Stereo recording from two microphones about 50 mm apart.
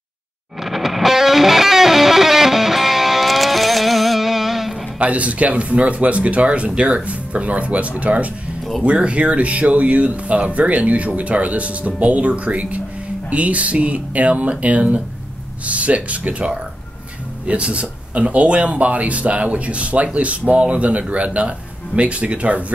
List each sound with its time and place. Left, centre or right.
0.6 s music: centre
4.9 s speech: right